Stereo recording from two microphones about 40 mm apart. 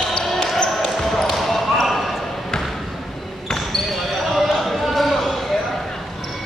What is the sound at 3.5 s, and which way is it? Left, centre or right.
Basketball bounce, centre.